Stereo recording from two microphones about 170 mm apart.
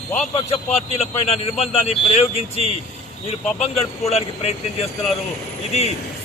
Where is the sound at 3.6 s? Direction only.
40° left (ahead or behind).